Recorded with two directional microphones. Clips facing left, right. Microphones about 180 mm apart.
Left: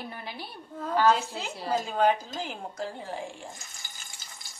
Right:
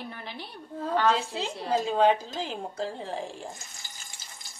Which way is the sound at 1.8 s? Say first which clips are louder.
Right 3 dB; 25° right (ahead or behind).